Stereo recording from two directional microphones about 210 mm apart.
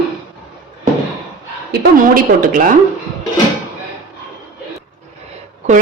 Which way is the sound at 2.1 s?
40° right (ahead or behind).